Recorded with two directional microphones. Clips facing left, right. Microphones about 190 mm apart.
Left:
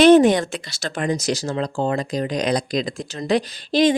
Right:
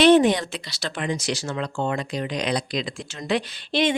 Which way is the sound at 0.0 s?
45° left (ahead or behind).